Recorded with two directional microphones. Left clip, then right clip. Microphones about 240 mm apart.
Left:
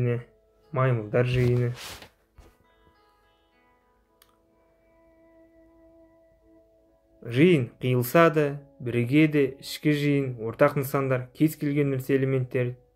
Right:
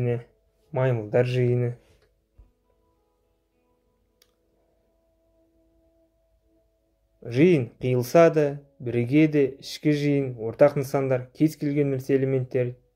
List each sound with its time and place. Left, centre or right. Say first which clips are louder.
0.0 s speech: right 1 dB; centre
7.2 s speech: right 1 dB; centre